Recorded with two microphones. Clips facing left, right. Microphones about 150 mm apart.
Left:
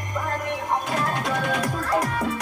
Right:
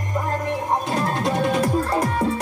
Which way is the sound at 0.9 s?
30° right (ahead or behind).